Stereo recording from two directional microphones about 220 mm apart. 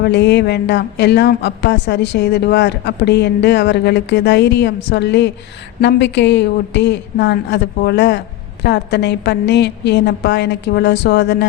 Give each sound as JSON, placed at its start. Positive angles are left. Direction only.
{"t": 0.0, "sound": "a woman's voice", "side_deg": 50}